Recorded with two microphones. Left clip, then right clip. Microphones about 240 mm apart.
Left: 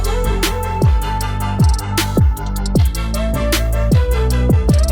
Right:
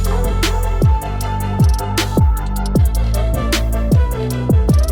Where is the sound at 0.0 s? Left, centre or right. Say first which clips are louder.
Left 1 dB; centre.